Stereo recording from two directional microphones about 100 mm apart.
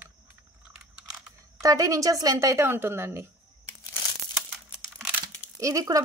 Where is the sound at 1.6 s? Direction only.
35° right (ahead or behind).